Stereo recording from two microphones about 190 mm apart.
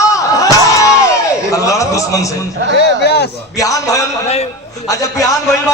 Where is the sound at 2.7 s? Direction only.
60° left (ahead or behind).